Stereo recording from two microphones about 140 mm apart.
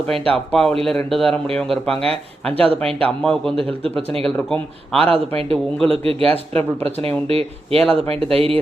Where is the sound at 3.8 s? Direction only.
40° right (ahead or behind).